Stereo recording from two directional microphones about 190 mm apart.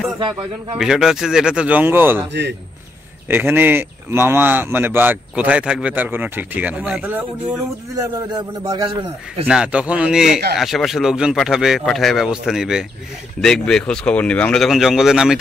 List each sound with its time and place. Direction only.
0.7 s speech: centre (ahead or behind)
3.3 s speech: 10° right (ahead or behind)
8.3 s a man's voice: 20° right (ahead or behind)
9.5 s speech: 5° right (ahead or behind)